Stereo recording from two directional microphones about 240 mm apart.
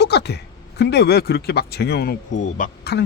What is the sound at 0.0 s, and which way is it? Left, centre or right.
Speech, left.